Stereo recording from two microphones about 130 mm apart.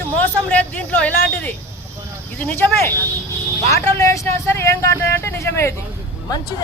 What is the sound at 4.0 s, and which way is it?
Speech, 20° left (ahead or behind).